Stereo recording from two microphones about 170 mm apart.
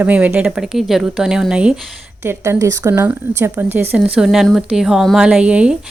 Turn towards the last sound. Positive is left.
turn(degrees=-5)  # may be behind; listen again after turning